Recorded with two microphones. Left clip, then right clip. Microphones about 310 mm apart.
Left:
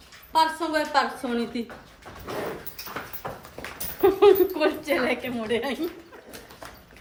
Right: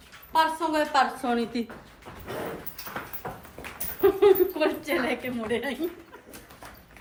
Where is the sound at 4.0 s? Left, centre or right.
Centre.